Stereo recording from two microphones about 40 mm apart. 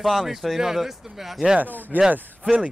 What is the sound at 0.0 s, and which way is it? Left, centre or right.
A man's voice, centre.